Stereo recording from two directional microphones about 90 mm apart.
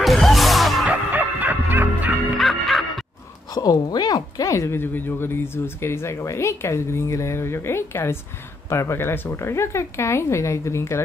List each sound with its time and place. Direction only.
0.0 s music: centre (ahead or behind)
0.8 s music: 20° right (ahead or behind)
2.3 s music: centre (ahead or behind)
3.5 s speech: 45° left (ahead or behind); by 11.0 s 30° left (ahead or behind)